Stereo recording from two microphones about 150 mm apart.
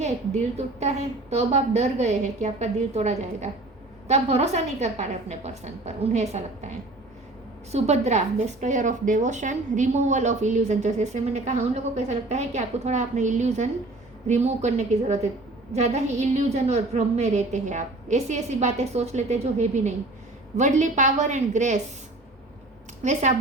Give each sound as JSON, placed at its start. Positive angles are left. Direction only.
{"t": 0.5, "sound": "a woman's voice", "side_deg": -45}
{"t": 23.0, "sound": "a woman's voice", "side_deg": -50}